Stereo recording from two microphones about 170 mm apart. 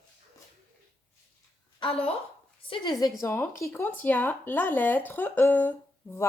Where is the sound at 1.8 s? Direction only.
35° left (ahead or behind).